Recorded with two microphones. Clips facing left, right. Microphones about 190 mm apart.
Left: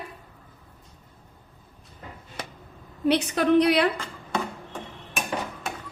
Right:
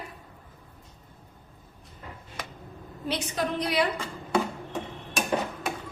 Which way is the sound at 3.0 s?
65° left (ahead or behind).